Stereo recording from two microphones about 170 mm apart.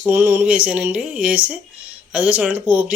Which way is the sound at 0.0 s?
15° right (ahead or behind).